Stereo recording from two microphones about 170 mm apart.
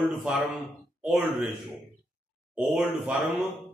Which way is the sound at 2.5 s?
5° right (ahead or behind).